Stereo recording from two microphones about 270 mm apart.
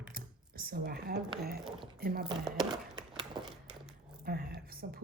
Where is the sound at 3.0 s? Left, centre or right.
Centre.